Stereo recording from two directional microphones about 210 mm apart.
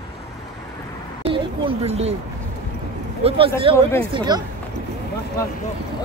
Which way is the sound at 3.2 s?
30° right (ahead or behind).